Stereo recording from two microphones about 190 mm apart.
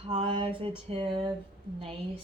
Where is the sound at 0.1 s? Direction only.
30° right (ahead or behind).